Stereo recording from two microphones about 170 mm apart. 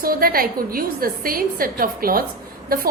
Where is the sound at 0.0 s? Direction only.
60° right (ahead or behind).